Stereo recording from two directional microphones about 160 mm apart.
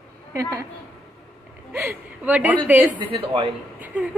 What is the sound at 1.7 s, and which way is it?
A woman's voice, 15° right (ahead or behind).